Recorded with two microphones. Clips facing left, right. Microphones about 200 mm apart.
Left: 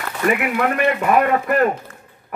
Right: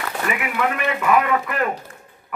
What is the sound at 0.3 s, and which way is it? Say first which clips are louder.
A man's voice: left 5 dB; 45° left (ahead or behind).